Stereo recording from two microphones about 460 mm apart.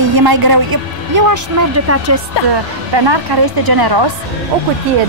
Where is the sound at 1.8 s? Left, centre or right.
Right.